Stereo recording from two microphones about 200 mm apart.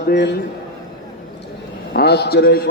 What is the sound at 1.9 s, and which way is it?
Speech, 55° left (ahead or behind).